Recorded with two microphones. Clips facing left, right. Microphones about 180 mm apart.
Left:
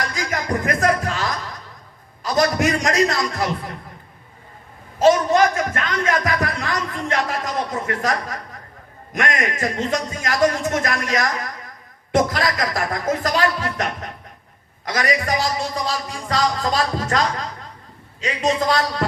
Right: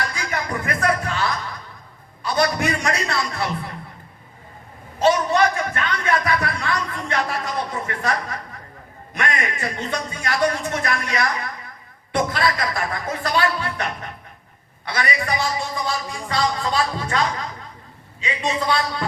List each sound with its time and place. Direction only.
0.2 s music: 40° left (ahead or behind)
2.2 s a man's voice: 40° left (ahead or behind)
5.0 s speech: 40° left (ahead or behind)
7.3 s a sound: 40° left (ahead or behind)
9.1 s speech: 40° left (ahead or behind)